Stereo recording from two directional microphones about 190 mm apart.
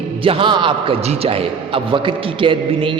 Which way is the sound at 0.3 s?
25° right (ahead or behind).